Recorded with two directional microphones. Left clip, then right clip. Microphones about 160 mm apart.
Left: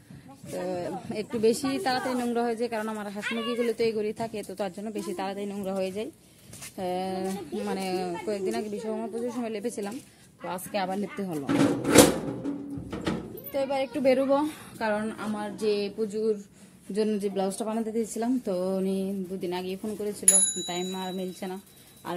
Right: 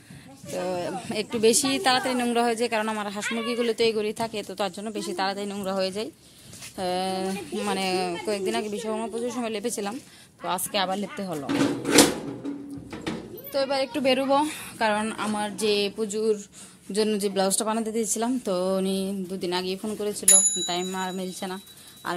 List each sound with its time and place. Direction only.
0.6 s speech: 5° right (ahead or behind)
3.2 s speech: 35° right (ahead or behind)
3.6 s speech: centre (ahead or behind)
13.5 s a woman's voice: 15° left (ahead or behind)
14.8 s speech: 10° right (ahead or behind)